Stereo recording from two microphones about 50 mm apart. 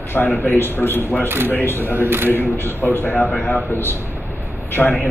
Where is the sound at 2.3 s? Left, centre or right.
Left.